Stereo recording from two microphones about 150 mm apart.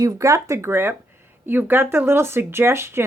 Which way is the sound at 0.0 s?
20° right (ahead or behind).